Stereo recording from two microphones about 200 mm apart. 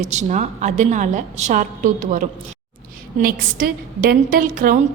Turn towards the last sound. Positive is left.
turn(degrees=-45)  # may be behind; listen again after turning